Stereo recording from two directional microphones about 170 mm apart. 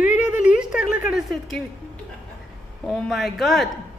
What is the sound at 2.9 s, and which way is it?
Speech, centre (ahead or behind).